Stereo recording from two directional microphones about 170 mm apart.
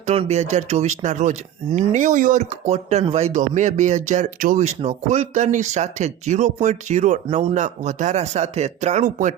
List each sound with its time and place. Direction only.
0.0 s speech: 40° right (ahead or behind)